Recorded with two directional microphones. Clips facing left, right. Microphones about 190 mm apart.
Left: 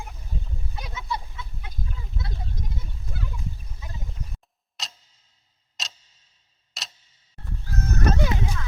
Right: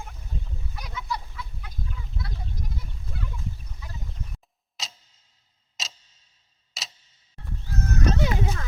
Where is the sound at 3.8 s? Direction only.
20° left (ahead or behind).